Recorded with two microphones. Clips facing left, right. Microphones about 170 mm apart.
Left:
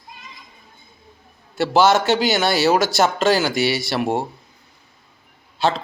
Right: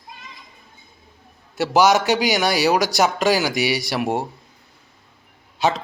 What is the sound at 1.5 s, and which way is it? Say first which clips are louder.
Speech: left 1 dB; 15° right (ahead or behind).